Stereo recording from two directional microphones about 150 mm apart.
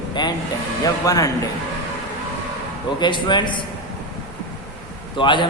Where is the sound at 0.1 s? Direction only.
30° left (ahead or behind).